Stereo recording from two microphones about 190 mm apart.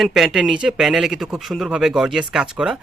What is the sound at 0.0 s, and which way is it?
Speech, centre (ahead or behind).